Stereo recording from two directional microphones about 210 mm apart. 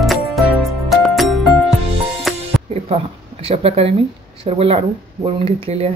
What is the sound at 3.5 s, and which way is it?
Speech, 25° right (ahead or behind).